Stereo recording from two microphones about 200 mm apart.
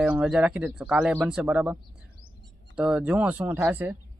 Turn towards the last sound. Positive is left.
turn(degrees=-10)  # may be behind; listen again after turning